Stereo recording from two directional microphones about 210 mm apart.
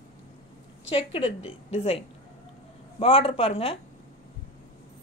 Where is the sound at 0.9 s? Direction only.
25° left (ahead or behind).